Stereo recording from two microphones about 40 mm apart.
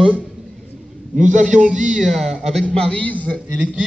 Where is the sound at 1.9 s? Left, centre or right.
Centre.